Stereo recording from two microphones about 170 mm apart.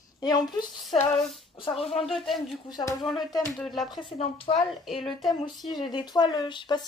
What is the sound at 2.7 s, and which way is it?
Speech, 25° left (ahead or behind).